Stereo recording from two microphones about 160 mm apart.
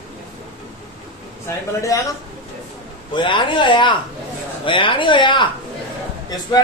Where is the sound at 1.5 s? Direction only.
20° left (ahead or behind).